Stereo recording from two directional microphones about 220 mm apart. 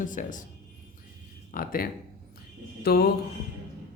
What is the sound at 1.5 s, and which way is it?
A man's voice, 40° left (ahead or behind).